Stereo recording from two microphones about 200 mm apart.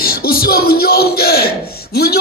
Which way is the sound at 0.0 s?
50° left (ahead or behind).